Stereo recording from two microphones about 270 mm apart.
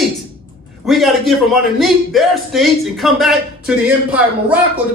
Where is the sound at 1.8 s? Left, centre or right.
Centre.